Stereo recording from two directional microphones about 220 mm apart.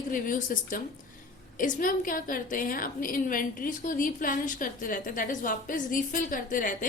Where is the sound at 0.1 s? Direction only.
35° left (ahead or behind).